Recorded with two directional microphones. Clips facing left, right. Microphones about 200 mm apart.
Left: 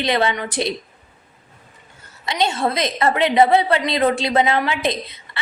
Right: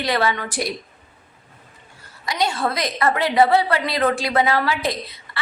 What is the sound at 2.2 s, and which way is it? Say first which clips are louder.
A woman's voice: left 2 dB; 25° left (ahead or behind).